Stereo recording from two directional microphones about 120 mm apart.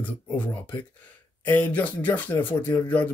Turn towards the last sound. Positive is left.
turn(degrees=15)  # may be behind; listen again after turning